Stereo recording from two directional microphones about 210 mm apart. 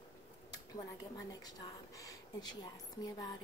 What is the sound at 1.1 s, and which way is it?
A woman's voice, 20° left (ahead or behind).